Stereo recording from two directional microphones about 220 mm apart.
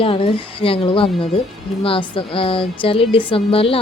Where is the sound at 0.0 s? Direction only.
25° left (ahead or behind).